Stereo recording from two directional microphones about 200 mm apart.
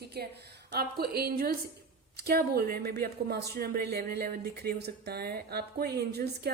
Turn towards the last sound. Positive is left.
turn(degrees=-55)  # may be behind; listen again after turning